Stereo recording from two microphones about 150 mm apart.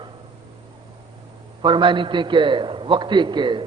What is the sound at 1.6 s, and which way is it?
A man's voice, 30° right (ahead or behind).